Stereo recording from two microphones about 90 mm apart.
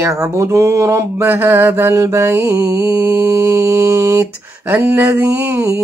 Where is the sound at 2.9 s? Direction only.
30° right (ahead or behind).